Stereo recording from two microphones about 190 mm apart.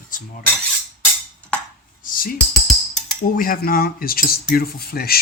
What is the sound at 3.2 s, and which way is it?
Speech, 50° left (ahead or behind).